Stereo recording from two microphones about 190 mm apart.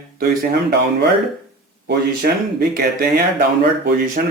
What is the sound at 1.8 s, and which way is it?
Speech, 55° right (ahead or behind).